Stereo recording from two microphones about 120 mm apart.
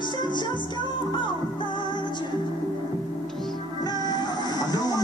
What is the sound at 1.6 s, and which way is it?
Music, 40° left (ahead or behind).